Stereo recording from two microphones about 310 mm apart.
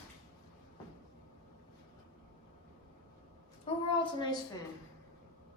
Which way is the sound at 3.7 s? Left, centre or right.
Centre.